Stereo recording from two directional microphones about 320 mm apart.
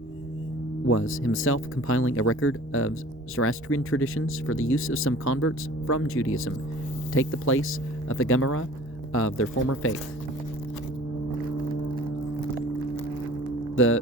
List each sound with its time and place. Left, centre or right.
0.9 s speech: left
13.7 s music: left